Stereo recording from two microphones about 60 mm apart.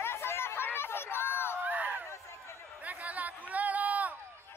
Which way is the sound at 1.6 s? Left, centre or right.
Right.